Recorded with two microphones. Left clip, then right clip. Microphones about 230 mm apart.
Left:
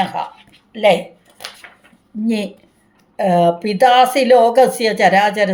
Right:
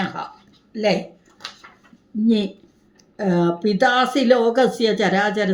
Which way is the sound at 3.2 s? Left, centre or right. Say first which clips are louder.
Left 6 dB; left.